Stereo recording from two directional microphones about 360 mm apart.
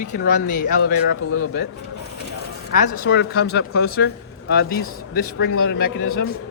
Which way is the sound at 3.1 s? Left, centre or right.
Left.